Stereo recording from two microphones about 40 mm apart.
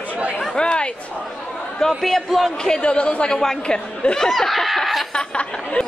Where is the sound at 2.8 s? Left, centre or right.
Left.